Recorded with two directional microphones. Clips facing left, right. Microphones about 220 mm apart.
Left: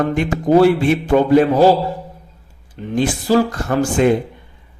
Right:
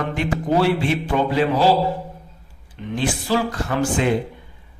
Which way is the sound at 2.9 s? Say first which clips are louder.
Left 6 dB; 45° left (ahead or behind).